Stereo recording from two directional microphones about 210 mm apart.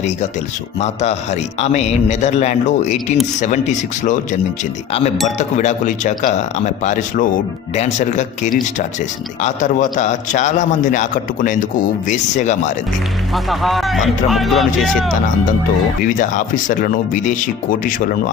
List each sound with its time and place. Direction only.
0.8 s a man's voice: 30° left (ahead or behind)
13.3 s speech: centre (ahead or behind)
16.0 s a man's voice: 40° left (ahead or behind)